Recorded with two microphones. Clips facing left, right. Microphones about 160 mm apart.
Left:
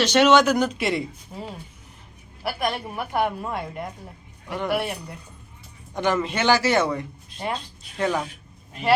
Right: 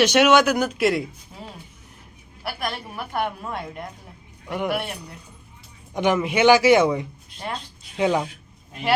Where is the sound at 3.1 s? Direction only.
10° left (ahead or behind).